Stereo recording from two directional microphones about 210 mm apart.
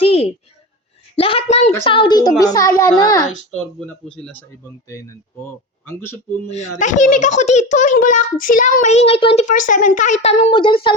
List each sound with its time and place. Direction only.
0.0 s a sound: 30° left (ahead or behind)
1.1 s a woman's voice: 25° left (ahead or behind)
3.8 s a child's voice: 5° left (ahead or behind)
6.5 s a child's voice: 35° left (ahead or behind)